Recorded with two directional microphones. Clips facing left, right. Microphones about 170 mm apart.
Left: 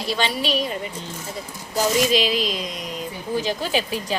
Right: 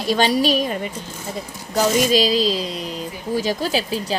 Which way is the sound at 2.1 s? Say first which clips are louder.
Right 4 dB; 35° right (ahead or behind).